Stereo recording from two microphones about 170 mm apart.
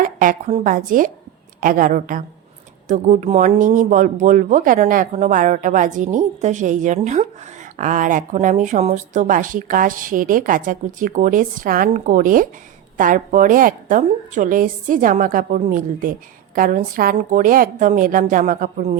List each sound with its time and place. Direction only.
0.0 s speech: 50° right (ahead or behind)